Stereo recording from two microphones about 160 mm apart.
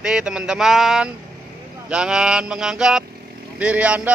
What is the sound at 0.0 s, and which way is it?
Speech, 5° right (ahead or behind).